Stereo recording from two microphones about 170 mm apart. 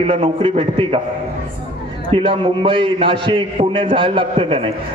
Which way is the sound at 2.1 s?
30° right (ahead or behind).